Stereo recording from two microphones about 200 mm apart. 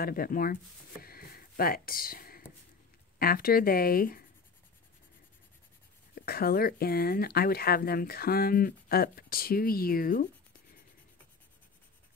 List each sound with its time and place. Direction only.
0.0 s speech: 45° left (ahead or behind)
1.0 s a sound: 50° left (ahead or behind)
3.2 s speech: 45° left (ahead or behind)
6.1 s speech: 50° left (ahead or behind)